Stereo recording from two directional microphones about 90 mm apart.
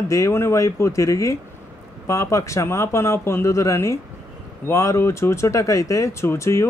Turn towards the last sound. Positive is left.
turn(degrees=30)  # may be behind; listen again after turning